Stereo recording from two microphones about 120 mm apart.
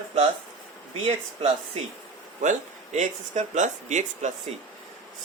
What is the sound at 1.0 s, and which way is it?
Speech, 60° right (ahead or behind).